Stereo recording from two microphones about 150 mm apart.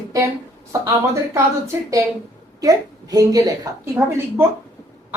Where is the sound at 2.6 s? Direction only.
25° right (ahead or behind).